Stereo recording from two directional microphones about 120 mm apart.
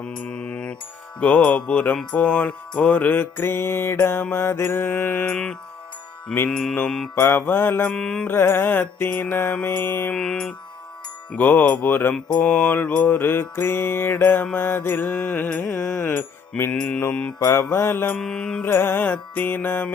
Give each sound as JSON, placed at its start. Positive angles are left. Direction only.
{"t": 0.0, "sound": "mantra", "side_deg": 10}
{"t": 1.2, "sound": "music", "side_deg": 10}
{"t": 7.2, "sound": "music", "side_deg": 20}
{"t": 7.9, "sound": "music", "side_deg": 5}
{"t": 8.3, "sound": "music", "side_deg": 20}
{"t": 10.2, "sound": "music", "side_deg": 5}
{"t": 16.7, "sound": "music", "side_deg": 10}
{"t": 17.4, "sound": "mantra", "side_deg": 20}
{"t": 18.2, "sound": "music", "side_deg": 5}
{"t": 18.6, "sound": "music", "side_deg": 20}